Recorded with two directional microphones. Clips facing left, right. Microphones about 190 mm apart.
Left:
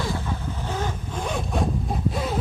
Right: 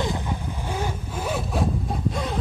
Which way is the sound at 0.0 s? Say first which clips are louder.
Right 1 dB; 15° right (ahead or behind).